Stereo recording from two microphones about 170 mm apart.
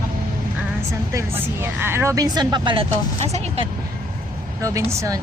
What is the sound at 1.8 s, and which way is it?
Speech, 15° right (ahead or behind).